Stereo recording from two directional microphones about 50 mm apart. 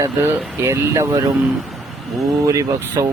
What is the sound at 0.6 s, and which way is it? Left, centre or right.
Speech, right.